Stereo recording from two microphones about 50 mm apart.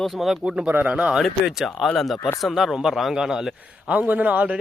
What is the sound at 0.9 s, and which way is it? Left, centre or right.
Speech, centre.